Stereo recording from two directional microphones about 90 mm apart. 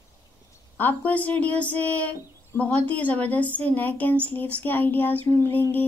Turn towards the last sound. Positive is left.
turn(degrees=20)  # may be behind; listen again after turning